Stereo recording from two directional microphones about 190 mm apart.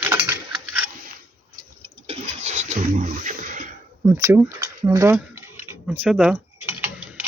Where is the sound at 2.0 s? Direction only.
35° right (ahead or behind).